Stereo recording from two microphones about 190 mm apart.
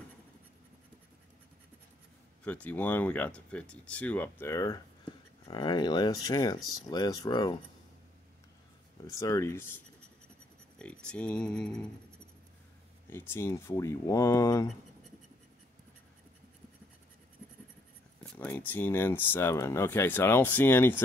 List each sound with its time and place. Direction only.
2.4 s speech: 5° left (ahead or behind)
9.0 s speech: 15° left (ahead or behind)
13.1 s speech: 10° left (ahead or behind)
18.2 s a sound: 5° left (ahead or behind)
18.7 s speech: 10° left (ahead or behind)